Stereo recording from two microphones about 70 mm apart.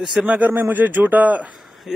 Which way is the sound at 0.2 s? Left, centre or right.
Right.